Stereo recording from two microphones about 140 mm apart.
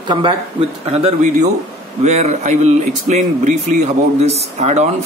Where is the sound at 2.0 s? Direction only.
55° right (ahead or behind).